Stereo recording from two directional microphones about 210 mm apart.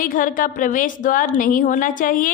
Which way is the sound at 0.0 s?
40° left (ahead or behind).